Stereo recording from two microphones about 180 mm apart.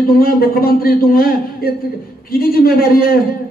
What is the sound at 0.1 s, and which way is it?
A man's voice, 55° left (ahead or behind).